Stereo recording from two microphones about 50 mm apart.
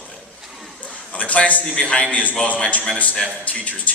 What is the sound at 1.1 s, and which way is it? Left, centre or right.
A man's voice, left.